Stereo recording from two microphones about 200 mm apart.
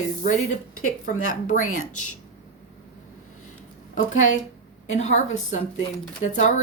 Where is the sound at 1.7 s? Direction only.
90° left.